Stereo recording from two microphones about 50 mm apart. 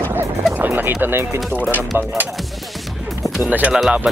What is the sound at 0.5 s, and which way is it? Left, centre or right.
Speech, right.